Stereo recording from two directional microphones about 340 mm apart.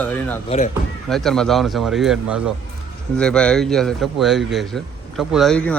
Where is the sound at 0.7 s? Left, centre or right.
Centre.